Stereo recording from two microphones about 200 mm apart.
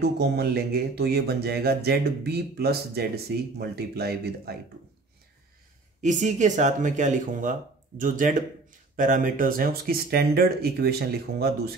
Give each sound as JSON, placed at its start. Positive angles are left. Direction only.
{"t": 0.0, "sound": "speech", "side_deg": -55}
{"t": 5.9, "sound": "speech", "side_deg": -40}